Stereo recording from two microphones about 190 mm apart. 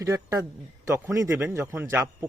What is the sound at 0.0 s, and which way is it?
Speech, 15° right (ahead or behind).